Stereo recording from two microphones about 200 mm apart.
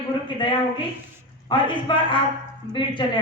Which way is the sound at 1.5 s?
25° left (ahead or behind).